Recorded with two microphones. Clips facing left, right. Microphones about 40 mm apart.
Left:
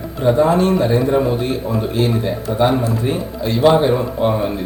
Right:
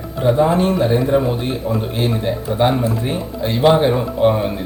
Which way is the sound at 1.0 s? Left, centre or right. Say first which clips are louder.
Left 1 dB; centre.